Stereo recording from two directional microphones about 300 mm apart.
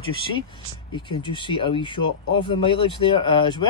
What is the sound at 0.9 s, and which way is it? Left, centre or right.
Speech, centre.